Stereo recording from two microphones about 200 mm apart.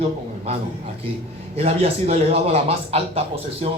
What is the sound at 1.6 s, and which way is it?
Speech, 30° right (ahead or behind).